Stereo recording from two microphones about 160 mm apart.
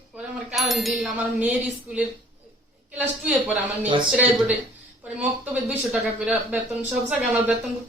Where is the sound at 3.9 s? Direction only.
30° right (ahead or behind).